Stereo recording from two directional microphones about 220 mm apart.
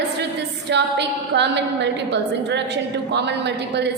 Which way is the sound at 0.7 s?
50° right (ahead or behind).